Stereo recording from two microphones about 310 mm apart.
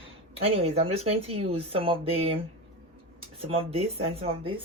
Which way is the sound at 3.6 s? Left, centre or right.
Centre.